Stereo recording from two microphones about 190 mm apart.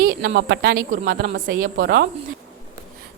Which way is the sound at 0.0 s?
55° right (ahead or behind).